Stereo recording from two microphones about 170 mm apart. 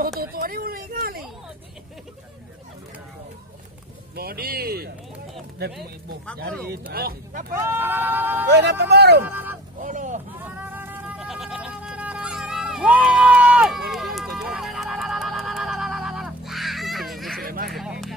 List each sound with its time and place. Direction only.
0.2 s vehicle: 60° right (ahead or behind)
4.1 s speech: 65° right (ahead or behind)
6.9 s speech: 60° right (ahead or behind)
7.5 s speech: 15° right (ahead or behind)
8.5 s speech: 80° right
9.2 s speech: 10° right (ahead or behind)
9.8 s speech: 50° right (ahead or behind)
10.4 s a sound: 10° right (ahead or behind)